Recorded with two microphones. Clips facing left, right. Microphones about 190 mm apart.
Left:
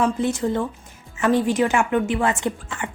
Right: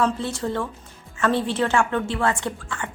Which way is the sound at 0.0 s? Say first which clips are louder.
Left 3 dB; 15° left (ahead or behind).